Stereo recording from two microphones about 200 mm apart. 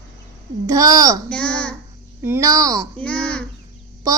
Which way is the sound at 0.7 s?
15° right (ahead or behind).